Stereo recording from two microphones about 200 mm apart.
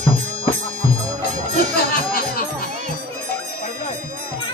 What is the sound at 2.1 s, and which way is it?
Music, 45° left (ahead or behind).